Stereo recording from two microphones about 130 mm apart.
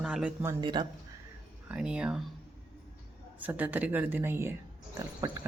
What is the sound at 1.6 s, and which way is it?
Speech, 5° right (ahead or behind).